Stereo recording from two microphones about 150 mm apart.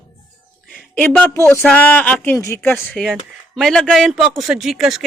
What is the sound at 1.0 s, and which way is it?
Speech, 10° left (ahead or behind).